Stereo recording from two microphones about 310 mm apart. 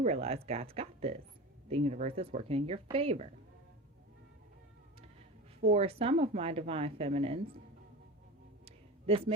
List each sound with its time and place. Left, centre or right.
0.0 s speech: centre
5.6 s speech: centre
8.6 s a sound: centre